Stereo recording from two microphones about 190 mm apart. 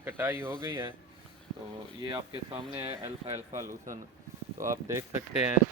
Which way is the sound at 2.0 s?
25° right (ahead or behind).